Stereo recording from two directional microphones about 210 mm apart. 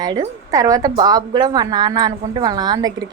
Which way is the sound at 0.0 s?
20° right (ahead or behind).